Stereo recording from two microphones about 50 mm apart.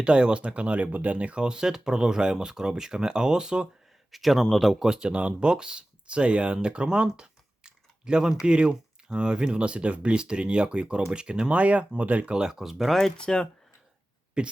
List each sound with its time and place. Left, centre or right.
0.0 s speech: centre
4.1 s speech: centre
4.9 s speech: centre
12.3 s speech: centre
12.5 s speech: centre
13.1 s speech: centre
14.4 s speech: right